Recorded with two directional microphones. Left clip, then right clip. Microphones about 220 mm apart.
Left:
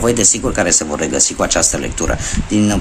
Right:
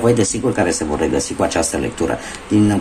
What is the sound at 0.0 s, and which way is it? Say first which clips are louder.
Speech: left 1 dB; 30° left (ahead or behind).